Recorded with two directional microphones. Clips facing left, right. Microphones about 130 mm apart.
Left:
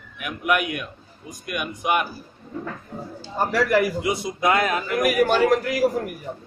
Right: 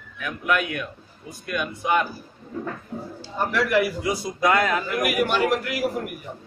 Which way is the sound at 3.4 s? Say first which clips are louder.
Left 2 dB; 40° left (ahead or behind).